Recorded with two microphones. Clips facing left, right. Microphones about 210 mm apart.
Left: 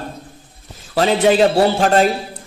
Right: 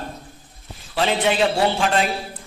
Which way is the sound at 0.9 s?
40° left (ahead or behind).